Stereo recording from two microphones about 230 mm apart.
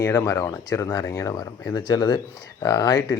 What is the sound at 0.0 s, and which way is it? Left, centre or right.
Speech, centre.